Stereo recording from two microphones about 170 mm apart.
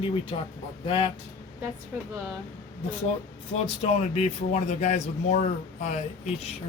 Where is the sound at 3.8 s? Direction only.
40° left (ahead or behind).